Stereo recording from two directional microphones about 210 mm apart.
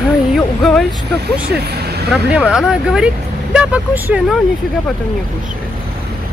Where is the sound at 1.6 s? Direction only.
50° right (ahead or behind).